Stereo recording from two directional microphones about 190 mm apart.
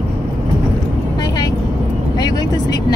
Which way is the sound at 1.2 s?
20° left (ahead or behind).